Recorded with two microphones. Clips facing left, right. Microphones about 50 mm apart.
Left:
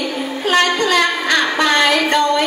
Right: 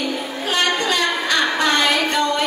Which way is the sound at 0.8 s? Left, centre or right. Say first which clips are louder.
Left 4 dB; left.